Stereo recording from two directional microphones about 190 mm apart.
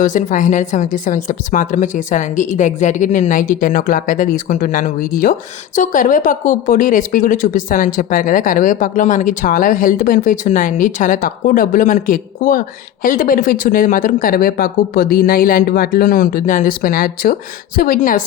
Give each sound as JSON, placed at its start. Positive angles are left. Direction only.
{"t": 0.0, "sound": "speech", "side_deg": 45}